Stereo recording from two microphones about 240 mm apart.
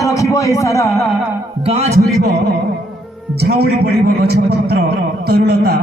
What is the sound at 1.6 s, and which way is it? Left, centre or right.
Speech, right.